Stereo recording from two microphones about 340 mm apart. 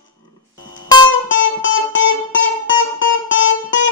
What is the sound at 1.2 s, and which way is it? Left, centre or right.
Music, left.